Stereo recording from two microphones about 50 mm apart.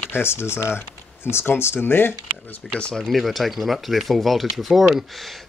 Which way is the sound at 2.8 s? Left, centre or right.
Centre.